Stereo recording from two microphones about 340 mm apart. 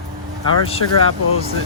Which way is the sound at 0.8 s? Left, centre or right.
Left.